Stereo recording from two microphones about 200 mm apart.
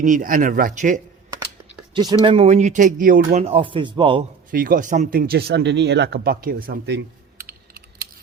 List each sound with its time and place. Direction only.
0.0 s speech: 40° right (ahead or behind)
1.9 s speech: 20° right (ahead or behind)
2.2 s speech: 30° right (ahead or behind)
4.5 s speech: 45° right (ahead or behind)